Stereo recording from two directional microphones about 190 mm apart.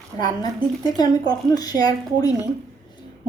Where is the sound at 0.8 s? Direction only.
20° left (ahead or behind).